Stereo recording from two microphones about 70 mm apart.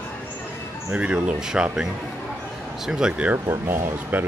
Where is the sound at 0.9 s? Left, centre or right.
Centre.